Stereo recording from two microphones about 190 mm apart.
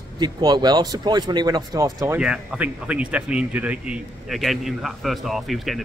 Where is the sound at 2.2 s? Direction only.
5° right (ahead or behind).